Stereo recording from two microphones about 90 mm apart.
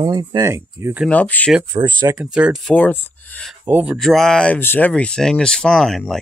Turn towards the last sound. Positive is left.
turn(degrees=0)  # may be behind; listen again after turning